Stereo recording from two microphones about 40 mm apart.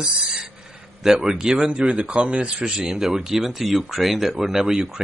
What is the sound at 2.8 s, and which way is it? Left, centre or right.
Speech, centre.